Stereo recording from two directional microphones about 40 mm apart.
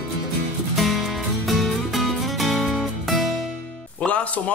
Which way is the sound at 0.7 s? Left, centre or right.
Centre.